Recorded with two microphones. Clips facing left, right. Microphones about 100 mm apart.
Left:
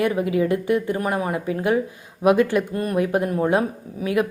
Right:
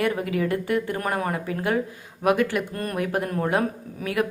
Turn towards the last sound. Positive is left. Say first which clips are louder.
# left 4 dB
turn(degrees=20)  # may be behind; listen again after turning